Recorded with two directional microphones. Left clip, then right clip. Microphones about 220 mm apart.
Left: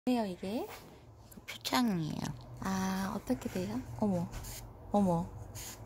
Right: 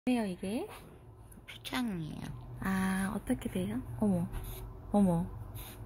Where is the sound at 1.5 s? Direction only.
55° left (ahead or behind).